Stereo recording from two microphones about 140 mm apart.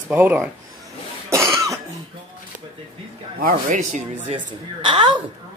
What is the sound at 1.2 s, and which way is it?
Cough, 20° right (ahead or behind).